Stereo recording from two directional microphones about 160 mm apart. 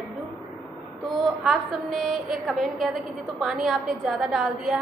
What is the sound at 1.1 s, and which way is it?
A woman's voice, centre (ahead or behind).